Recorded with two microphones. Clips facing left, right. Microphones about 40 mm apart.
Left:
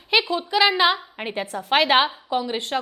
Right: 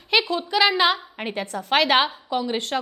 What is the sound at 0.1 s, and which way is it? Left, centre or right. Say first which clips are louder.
A woman's voice: left 1 dB; centre.